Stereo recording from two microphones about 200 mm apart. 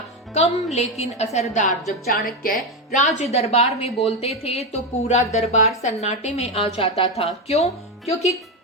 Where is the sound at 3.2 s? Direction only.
30° left (ahead or behind).